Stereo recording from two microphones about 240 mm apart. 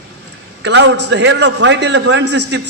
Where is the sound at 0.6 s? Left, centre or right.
Right.